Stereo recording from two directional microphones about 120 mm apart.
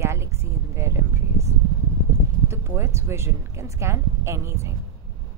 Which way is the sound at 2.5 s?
20° right (ahead or behind).